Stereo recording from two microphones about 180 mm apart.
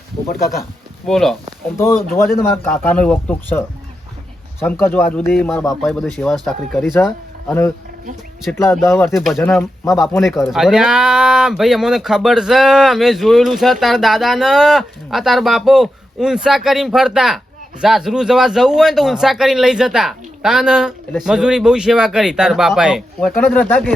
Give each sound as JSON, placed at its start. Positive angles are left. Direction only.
{"t": 1.0, "sound": "speech", "side_deg": 0}
{"t": 1.7, "sound": "speech", "side_deg": 15}
{"t": 4.6, "sound": "speech", "side_deg": 10}
{"t": 7.4, "sound": "speech", "side_deg": 15}
{"t": 9.0, "sound": "speech", "side_deg": 0}
{"t": 23.4, "sound": "speech", "side_deg": 10}